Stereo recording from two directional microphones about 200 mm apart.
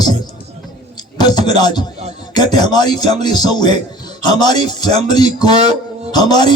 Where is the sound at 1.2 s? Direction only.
20° left (ahead or behind).